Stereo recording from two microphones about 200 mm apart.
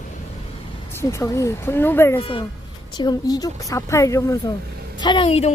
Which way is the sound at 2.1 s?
25° left (ahead or behind).